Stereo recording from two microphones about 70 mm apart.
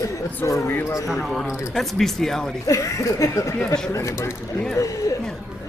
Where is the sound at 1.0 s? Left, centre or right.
Centre.